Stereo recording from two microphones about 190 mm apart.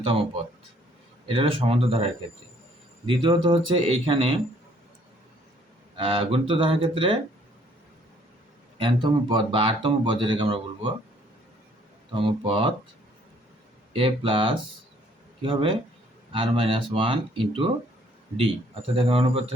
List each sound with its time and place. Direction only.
0.0 s speech: 30° right (ahead or behind)
1.3 s speech: 30° right (ahead or behind)
3.1 s speech: 25° right (ahead or behind)
6.0 s speech: 30° right (ahead or behind)
8.8 s speech: 25° right (ahead or behind)
12.1 s speech: 25° right (ahead or behind)
13.9 s speech: 30° right (ahead or behind)
18.9 s speech: 30° right (ahead or behind)